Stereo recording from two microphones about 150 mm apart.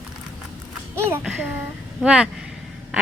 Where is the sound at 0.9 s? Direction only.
15° right (ahead or behind).